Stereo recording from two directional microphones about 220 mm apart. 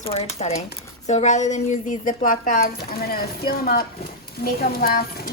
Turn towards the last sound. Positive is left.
turn(degrees=40)  # may be behind; listen again after turning